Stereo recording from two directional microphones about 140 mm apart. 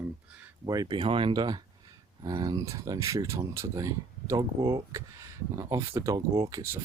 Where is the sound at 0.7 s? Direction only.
30° right (ahead or behind).